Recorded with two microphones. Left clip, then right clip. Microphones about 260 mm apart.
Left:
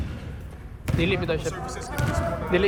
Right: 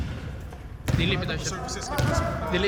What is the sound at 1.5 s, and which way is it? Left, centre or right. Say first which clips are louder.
Speech: left 1 dB; centre.